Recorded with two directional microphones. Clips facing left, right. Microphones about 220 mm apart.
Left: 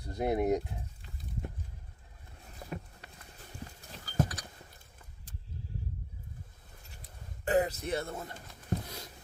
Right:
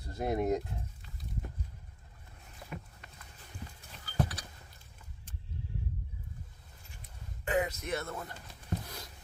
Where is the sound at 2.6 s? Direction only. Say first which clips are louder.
Left 3 dB; 40° left (ahead or behind).